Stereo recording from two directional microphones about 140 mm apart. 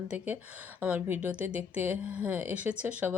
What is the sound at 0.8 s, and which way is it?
Speech, 10° right (ahead or behind).